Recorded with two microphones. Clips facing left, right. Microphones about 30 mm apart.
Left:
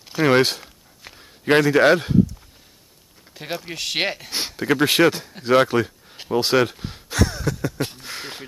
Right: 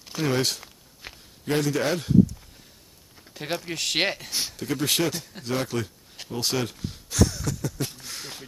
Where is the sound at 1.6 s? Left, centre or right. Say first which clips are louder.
Left 10 dB; left.